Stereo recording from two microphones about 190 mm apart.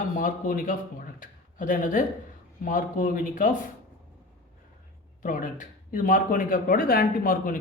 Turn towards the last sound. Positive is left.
turn(degrees=45)  # may be behind; listen again after turning